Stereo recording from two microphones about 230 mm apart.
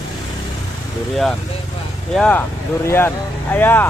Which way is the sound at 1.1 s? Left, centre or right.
Centre.